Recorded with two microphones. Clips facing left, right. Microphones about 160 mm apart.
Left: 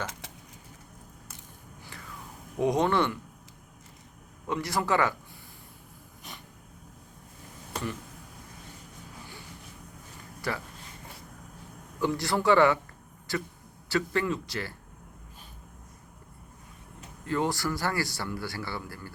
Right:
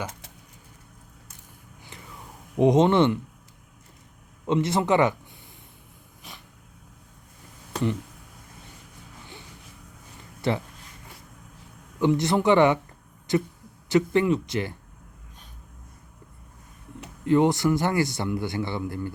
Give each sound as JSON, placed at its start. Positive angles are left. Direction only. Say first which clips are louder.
{"t": 2.6, "sound": "a man's voice", "louder": "right 7 dB", "side_deg": -20}
{"t": 4.4, "sound": "a man's voice", "louder": "right 6 dB", "side_deg": -20}
{"t": 6.3, "sound": "a sound", "louder": "even", "side_deg": 0}
{"t": 10.4, "sound": "speech", "louder": "right 7 dB", "side_deg": -25}
{"t": 11.9, "sound": "a man's voice", "louder": "right 6 dB", "side_deg": -20}
{"t": 17.2, "sound": "a man's voice", "louder": "right 9 dB", "side_deg": -20}